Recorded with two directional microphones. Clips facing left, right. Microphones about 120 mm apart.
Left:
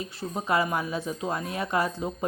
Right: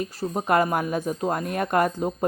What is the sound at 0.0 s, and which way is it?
A woman's voice, 50° right (ahead or behind).